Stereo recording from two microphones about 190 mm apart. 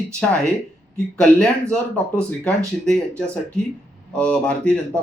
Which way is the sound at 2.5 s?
5° left (ahead or behind).